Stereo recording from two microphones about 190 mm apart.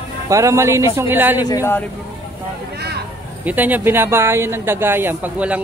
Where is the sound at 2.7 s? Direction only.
60° right (ahead or behind).